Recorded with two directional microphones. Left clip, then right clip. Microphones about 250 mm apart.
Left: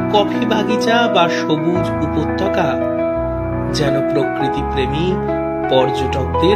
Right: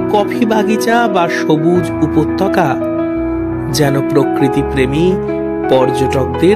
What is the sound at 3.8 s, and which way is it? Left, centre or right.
Speech, right.